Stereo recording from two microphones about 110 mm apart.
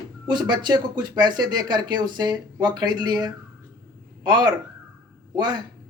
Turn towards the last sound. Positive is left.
turn(degrees=-40)  # may be behind; listen again after turning